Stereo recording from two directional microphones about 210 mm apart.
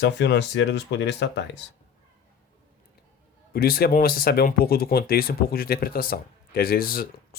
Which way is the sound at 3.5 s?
45° left (ahead or behind).